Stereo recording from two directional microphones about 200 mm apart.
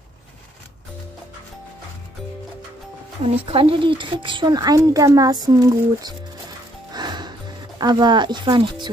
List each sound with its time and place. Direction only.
3.4 s speech: 30° right (ahead or behind)
6.9 s music: 20° right (ahead or behind)